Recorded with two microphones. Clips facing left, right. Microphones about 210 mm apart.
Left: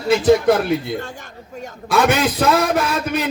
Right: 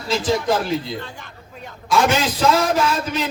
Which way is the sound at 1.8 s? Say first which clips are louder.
Left 2 dB; 60° left (ahead or behind).